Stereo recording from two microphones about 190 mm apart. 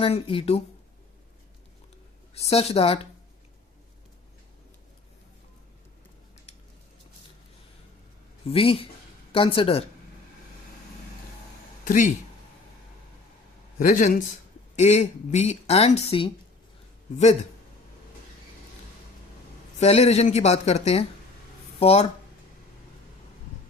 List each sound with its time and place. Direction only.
0.0 s speech: 30° left (ahead or behind)
2.3 s a woman's voice: 35° left (ahead or behind)
8.4 s speech: 30° left (ahead or behind)
11.9 s speech: 40° left (ahead or behind)
13.7 s a woman's voice: 45° left (ahead or behind)
19.8 s a woman's voice: 35° left (ahead or behind)